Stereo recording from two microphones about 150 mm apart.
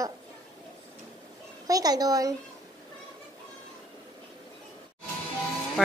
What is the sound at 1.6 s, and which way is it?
Speech, 25° right (ahead or behind).